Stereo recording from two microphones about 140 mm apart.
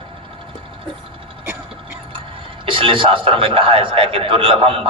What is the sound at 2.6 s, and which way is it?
A man's voice, 40° right (ahead or behind).